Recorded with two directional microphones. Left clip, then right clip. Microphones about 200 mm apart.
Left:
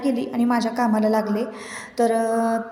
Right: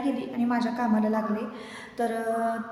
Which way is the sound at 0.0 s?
35° left (ahead or behind).